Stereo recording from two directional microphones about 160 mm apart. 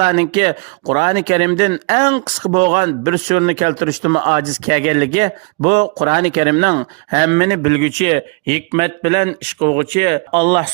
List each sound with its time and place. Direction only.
0.0 s speech: 45° right (ahead or behind)